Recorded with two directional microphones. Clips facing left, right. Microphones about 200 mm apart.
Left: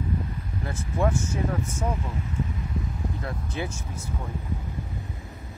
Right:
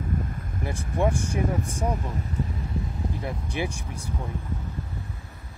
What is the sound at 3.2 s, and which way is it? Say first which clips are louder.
Speech: right 3 dB; 15° right (ahead or behind).